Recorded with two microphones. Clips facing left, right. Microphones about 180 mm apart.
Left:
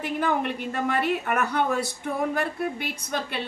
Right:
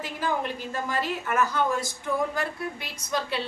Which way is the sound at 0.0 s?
65° left (ahead or behind).